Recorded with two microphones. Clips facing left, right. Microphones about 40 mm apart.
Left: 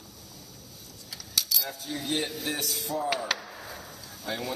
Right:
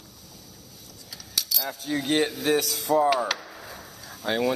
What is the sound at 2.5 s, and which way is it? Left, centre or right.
Speech, right.